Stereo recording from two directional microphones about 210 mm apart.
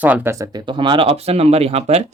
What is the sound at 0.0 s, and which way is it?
Speech, 10° right (ahead or behind).